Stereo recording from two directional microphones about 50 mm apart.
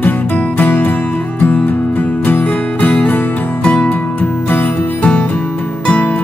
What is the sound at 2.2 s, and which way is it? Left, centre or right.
Music, left.